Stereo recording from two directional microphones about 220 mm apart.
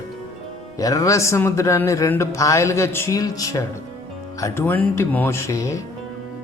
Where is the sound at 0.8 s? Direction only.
15° left (ahead or behind).